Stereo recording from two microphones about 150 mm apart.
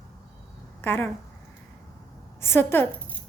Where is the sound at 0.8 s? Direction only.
15° left (ahead or behind).